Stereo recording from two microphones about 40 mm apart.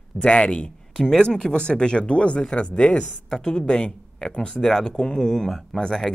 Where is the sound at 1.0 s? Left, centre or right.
Centre.